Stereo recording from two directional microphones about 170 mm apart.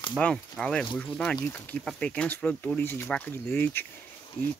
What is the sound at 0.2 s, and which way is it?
Speech, 5° left (ahead or behind).